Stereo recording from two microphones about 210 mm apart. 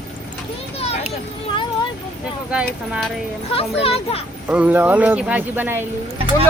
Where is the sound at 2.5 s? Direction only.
5° right (ahead or behind).